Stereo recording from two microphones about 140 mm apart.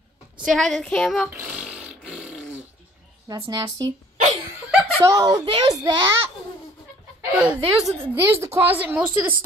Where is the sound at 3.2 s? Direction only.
30° right (ahead or behind).